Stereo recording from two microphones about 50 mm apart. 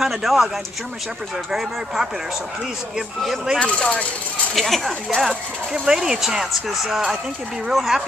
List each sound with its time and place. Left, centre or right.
0.0 s speech: centre
1.5 s speech: centre
3.5 s speech: left
4.6 s speech: centre